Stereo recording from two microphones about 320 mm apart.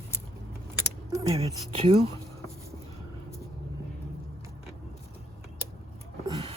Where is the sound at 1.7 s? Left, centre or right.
Centre.